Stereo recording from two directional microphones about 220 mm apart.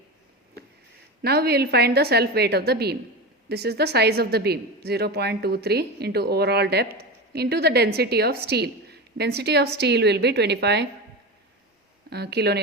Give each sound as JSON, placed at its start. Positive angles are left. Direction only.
{"t": 1.2, "sound": "a woman's voice", "side_deg": -45}
{"t": 12.1, "sound": "a woman's voice", "side_deg": -50}